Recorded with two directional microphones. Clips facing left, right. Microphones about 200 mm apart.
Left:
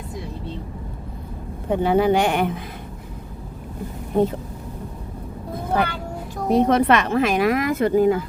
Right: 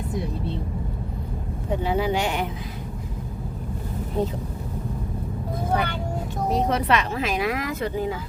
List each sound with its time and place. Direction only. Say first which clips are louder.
1.7 s speech: left 6 dB; 55° left (ahead or behind)
4.1 s speech: left 6 dB; 55° left (ahead or behind)
6.5 s speech: left 6 dB; 55° left (ahead or behind)